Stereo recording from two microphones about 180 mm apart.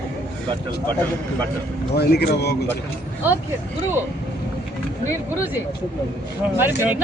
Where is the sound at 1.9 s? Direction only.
65° left (ahead or behind).